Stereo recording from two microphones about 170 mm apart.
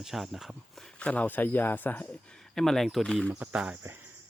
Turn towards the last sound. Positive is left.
turn(degrees=-10)  # may be behind; listen again after turning